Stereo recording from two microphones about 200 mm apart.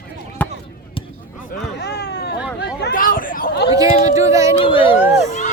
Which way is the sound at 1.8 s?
55° left (ahead or behind).